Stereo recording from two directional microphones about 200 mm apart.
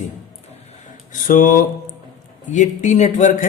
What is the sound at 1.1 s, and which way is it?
Speech, 40° left (ahead or behind).